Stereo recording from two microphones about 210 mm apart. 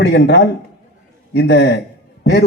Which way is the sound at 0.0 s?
55° left (ahead or behind).